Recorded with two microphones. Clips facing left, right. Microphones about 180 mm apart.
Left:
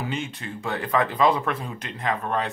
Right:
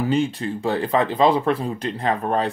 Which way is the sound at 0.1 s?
35° right (ahead or behind).